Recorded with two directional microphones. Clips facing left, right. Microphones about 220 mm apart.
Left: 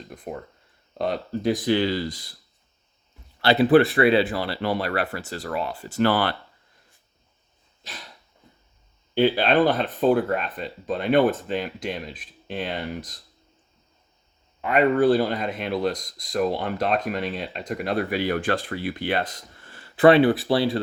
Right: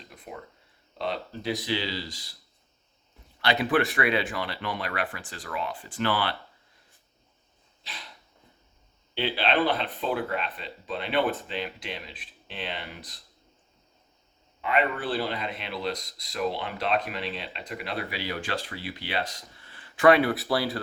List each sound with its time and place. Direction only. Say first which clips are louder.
0.1 s speech: left 7 dB; 45° left (ahead or behind)
3.4 s speech: left 8 dB; 35° left (ahead or behind)
7.8 s dog: left 3 dB; 45° left (ahead or behind)
9.1 s speech: left 7 dB; 45° left (ahead or behind)
14.6 s speech: left 9 dB; 45° left (ahead or behind); by 20.8 s 25° left (ahead or behind)